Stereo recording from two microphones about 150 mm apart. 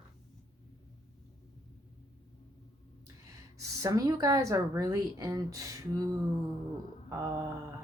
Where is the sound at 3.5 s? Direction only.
20° right (ahead or behind).